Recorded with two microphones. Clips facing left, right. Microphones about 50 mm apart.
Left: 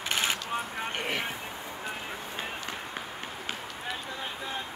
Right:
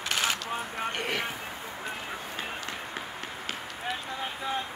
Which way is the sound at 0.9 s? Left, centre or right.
Centre.